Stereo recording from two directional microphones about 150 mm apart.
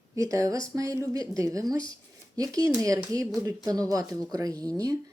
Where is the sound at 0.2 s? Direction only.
20° right (ahead or behind).